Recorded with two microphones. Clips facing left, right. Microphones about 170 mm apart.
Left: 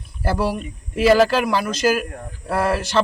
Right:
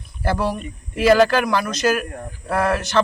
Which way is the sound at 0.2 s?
5° left (ahead or behind).